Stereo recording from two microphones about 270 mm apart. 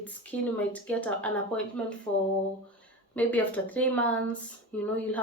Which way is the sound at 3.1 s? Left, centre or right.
Centre.